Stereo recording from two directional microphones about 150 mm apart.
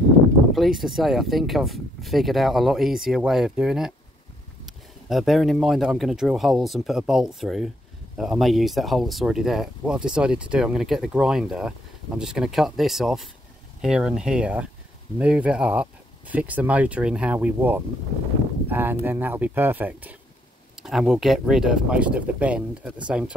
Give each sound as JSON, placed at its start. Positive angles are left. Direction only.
{"t": 0.5, "sound": "speech", "side_deg": 0}